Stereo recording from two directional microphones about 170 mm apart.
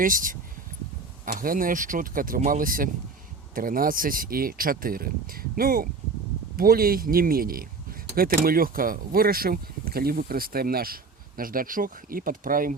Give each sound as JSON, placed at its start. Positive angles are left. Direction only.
{"t": 0.0, "sound": "speech", "side_deg": -55}